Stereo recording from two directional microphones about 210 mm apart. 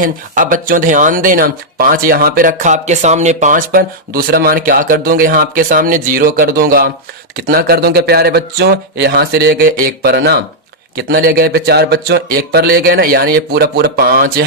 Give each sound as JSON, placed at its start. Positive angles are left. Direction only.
{"t": 0.0, "sound": "speech", "side_deg": -40}